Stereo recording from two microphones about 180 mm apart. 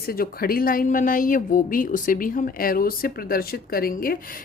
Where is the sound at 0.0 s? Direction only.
55° left (ahead or behind).